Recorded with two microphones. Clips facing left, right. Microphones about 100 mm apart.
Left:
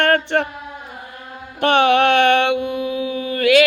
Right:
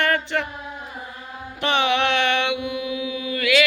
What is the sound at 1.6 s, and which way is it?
Music, 50° left (ahead or behind).